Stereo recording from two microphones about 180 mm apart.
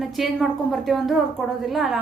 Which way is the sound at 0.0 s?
Centre (ahead or behind).